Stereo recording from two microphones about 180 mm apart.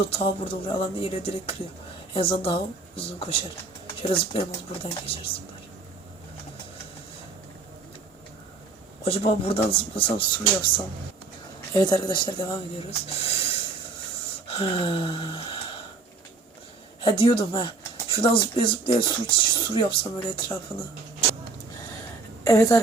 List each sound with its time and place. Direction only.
0.1 s speech: 30° left (ahead or behind)
9.0 s speech: 30° left (ahead or behind)
11.7 s speech: 20° left (ahead or behind)
14.4 s gasp: 30° left (ahead or behind)
17.0 s speech: 30° left (ahead or behind)
22.4 s a woman's voice: 15° left (ahead or behind)